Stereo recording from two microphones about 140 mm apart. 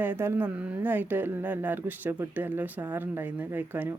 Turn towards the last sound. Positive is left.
turn(degrees=-15)  # may be behind; listen again after turning